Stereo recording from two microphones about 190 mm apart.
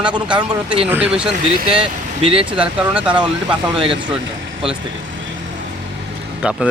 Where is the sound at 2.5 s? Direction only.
5° right (ahead or behind).